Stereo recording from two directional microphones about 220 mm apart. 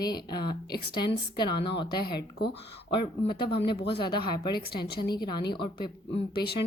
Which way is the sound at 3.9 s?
20° left (ahead or behind).